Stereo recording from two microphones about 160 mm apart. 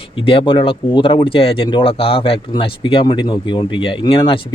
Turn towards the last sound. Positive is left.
turn(degrees=35)  # may be behind; listen again after turning